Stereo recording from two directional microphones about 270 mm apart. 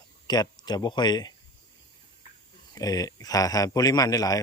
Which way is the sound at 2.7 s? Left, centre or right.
Centre.